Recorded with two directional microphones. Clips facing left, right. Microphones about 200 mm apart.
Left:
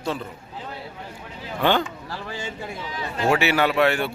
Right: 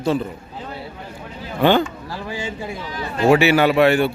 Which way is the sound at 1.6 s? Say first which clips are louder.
Right 6 dB; 5° right (ahead or behind).